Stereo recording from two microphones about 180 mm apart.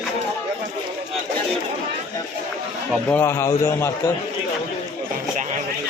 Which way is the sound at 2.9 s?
10° left (ahead or behind).